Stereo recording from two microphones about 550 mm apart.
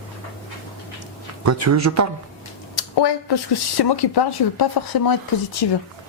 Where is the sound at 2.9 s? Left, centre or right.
Left.